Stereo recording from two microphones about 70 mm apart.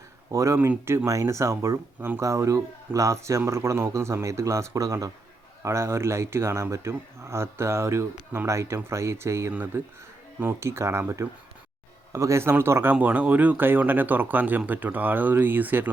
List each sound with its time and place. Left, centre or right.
0.3 s speech: right
2.0 s speech: right
2.2 s speech: right
5.6 s speech: right
12.1 s speech: right